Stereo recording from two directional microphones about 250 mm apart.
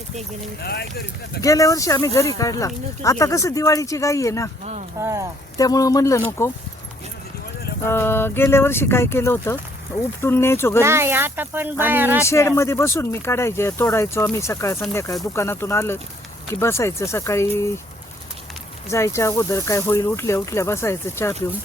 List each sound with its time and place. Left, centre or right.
0.6 s speech: left
1.4 s speech: centre
5.0 s speech: centre
5.5 s speech: centre
7.9 s speech: centre
10.8 s speech: centre
12.2 s speech: centre
18.9 s speech: centre